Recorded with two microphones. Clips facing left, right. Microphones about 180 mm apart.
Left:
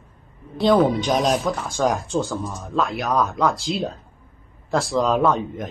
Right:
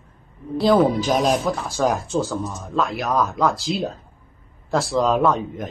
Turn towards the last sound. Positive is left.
turn(degrees=0)  # may be behind; listen again after turning